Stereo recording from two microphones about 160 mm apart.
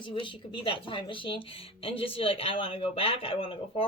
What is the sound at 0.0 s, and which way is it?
A woman's voice, 30° left (ahead or behind).